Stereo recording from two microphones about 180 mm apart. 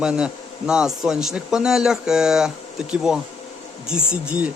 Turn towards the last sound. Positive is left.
turn(degrees=-5)  # may be behind; listen again after turning